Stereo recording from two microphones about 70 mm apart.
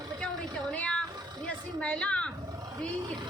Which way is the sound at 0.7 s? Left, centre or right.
Centre.